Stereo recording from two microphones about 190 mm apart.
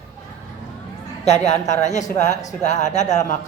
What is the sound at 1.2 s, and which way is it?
A man's voice, 35° left (ahead or behind).